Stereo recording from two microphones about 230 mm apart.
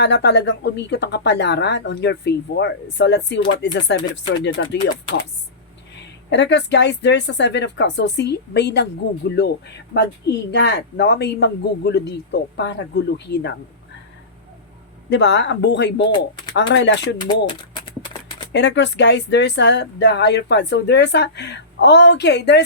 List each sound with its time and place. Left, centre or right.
0.0 s speech: left
6.3 s speech: left
15.1 s speech: left
18.5 s speech: left